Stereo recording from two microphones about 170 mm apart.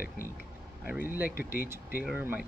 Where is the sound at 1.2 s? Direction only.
60° left (ahead or behind).